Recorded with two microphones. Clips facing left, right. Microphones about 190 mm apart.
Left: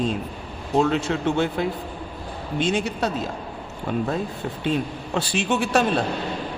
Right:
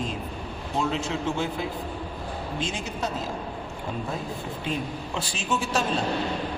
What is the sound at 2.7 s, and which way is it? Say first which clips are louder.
Speech: left 8 dB; 65° left (ahead or behind).